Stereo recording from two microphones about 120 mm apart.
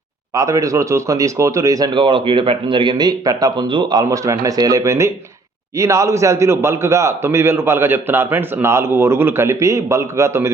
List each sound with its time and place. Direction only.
0.3 s a man's voice: 25° right (ahead or behind)
1.9 s a man's voice: 45° right (ahead or behind); by 10.5 s 25° right (ahead or behind)